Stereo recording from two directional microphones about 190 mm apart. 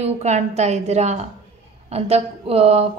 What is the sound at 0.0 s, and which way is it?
A woman's voice, 35° right (ahead or behind).